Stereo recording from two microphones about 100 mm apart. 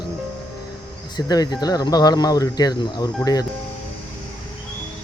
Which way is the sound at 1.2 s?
40° left (ahead or behind).